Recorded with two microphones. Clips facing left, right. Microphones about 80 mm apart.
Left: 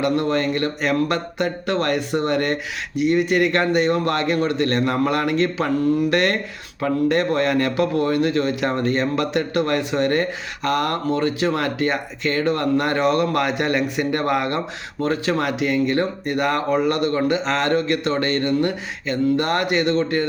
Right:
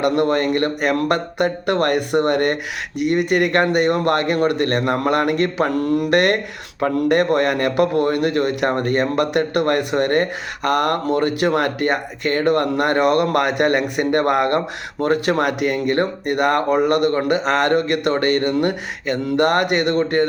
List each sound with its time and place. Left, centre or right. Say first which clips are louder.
0.0 s speech: right 3 dB; right